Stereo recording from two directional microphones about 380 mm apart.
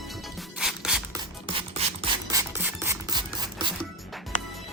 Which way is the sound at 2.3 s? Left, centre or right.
Centre.